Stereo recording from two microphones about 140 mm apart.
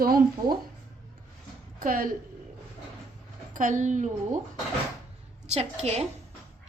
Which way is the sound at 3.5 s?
65° right (ahead or behind).